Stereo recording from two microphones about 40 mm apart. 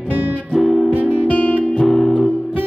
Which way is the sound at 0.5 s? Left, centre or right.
Centre.